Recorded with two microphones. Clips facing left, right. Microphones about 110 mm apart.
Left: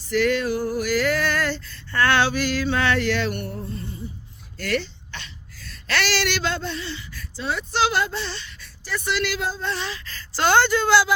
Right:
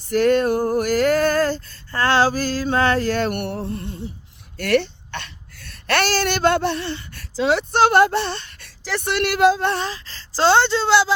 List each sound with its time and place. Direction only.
0.0 s a sound: 45° right (ahead or behind)
3.4 s music: 75° right (ahead or behind)
4.5 s a sound: 60° right (ahead or behind); by 7.6 s 85° right
7.7 s speech: 55° right (ahead or behind); by 9.0 s 80° right
9.0 s speech: 60° right (ahead or behind); by 9.7 s 75° right (ahead or behind)
9.7 s speech: 40° right (ahead or behind)